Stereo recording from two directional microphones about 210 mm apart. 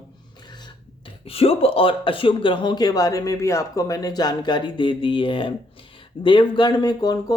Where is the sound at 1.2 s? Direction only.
25° left (ahead or behind).